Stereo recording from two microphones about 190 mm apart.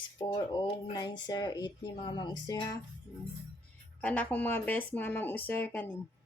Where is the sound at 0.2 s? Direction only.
20° left (ahead or behind).